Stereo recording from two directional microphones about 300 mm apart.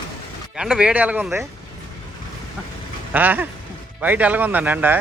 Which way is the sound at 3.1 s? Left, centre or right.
Centre.